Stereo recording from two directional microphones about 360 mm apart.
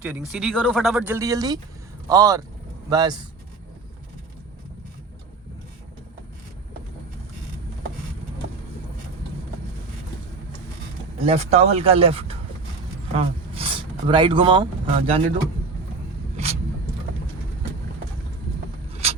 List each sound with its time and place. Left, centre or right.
0.2 s speech: centre
11.3 s speech: centre
16.4 s a sound: centre
19.0 s mechanisms: centre